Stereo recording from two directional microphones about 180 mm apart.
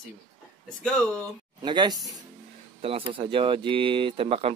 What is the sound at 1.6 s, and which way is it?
Speech, 25° right (ahead or behind).